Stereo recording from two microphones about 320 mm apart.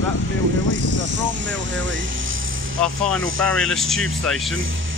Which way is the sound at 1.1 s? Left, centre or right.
Right.